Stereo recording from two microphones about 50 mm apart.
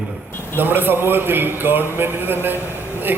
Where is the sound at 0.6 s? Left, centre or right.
Right.